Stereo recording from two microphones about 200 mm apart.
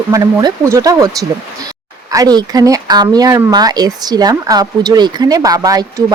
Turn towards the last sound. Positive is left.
turn(degrees=-20)  # may be behind; listen again after turning